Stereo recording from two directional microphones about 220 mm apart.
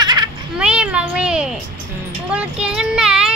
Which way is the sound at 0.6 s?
5° right (ahead or behind).